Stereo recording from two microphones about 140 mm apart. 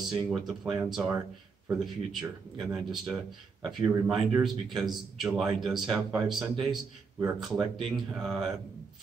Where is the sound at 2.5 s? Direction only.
Centre (ahead or behind).